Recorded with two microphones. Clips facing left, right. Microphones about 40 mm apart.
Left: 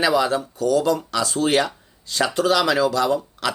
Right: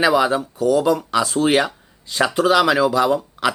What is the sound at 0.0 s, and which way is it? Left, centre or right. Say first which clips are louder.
Speech: right 3 dB; centre.